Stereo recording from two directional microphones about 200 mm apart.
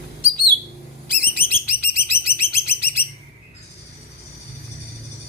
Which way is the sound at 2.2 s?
50° left (ahead or behind).